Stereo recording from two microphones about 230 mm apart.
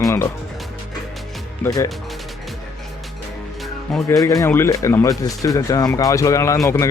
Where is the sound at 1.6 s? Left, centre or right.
Centre.